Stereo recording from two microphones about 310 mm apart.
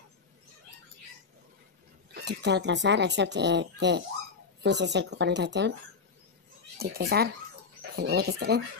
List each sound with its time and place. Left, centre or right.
2.1 s speech: right
6.8 s speech: right